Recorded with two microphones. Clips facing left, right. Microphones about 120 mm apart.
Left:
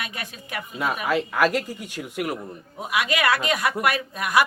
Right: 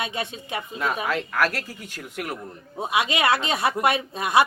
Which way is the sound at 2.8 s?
25° right (ahead or behind).